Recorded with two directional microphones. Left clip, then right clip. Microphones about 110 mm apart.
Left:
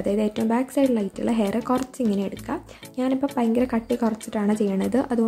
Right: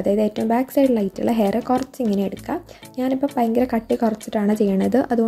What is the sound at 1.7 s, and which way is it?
A woman's voice, 15° right (ahead or behind).